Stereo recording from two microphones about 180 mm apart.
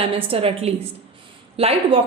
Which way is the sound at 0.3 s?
30° right (ahead or behind).